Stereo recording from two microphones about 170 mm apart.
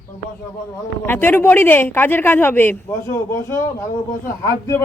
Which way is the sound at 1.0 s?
10° left (ahead or behind).